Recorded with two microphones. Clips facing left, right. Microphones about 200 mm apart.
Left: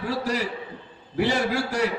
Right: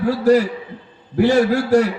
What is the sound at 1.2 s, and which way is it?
Speech, 45° right (ahead or behind).